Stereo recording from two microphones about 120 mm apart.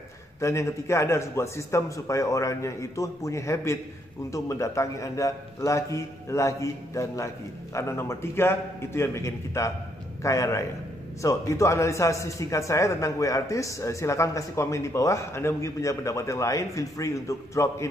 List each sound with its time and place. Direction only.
0.4 s a man's voice: 25° left (ahead or behind)